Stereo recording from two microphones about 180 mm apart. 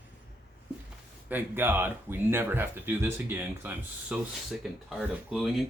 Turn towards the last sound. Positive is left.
turn(degrees=0)  # may be behind; listen again after turning